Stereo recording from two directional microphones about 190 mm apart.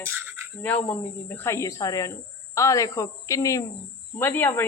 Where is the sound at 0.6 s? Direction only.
10° left (ahead or behind).